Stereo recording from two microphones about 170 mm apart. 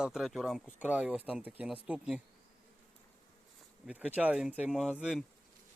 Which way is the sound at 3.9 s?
10° right (ahead or behind).